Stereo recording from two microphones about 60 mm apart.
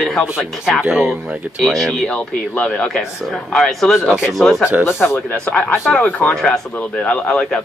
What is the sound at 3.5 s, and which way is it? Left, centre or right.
Speech, centre.